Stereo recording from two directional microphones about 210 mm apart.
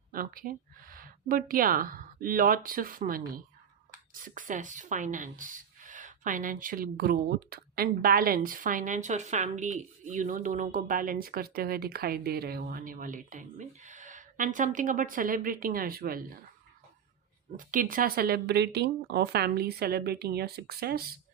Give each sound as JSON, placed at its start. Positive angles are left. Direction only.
{"t": 0.1, "sound": "speech", "side_deg": -45}
{"t": 17.6, "sound": "speech", "side_deg": -40}